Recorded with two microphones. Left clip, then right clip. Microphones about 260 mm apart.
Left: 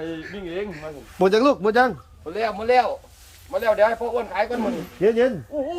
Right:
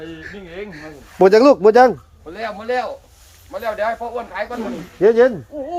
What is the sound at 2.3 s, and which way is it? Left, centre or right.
Speech, left.